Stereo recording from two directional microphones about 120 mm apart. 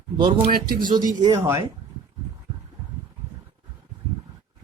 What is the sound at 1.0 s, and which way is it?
Speech, 35° right (ahead or behind).